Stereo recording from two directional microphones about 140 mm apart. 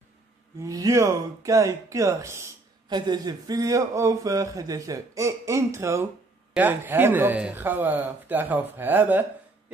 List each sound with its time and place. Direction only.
0.6 s speech: 25° right (ahead or behind)
2.9 s speech: 30° right (ahead or behind); by 9.2 s 15° right (ahead or behind)